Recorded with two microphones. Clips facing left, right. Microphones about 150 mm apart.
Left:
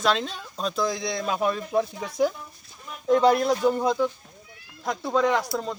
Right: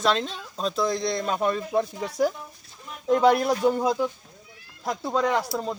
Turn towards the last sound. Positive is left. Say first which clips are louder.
# even
turn(degrees=0)  # may be behind; listen again after turning